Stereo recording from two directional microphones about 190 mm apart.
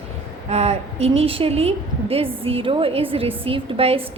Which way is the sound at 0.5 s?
35° right (ahead or behind).